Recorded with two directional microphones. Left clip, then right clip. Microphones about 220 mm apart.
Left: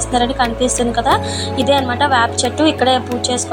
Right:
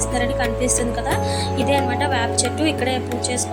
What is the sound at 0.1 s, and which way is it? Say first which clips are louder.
A woman's voice: left 7 dB; 5° left (ahead or behind).